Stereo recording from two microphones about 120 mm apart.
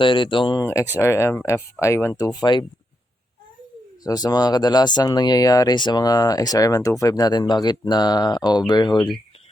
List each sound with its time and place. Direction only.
0.0 s speech: 45° left (ahead or behind)
0.6 s speech: 20° left (ahead or behind)
4.0 s speech: 35° left (ahead or behind)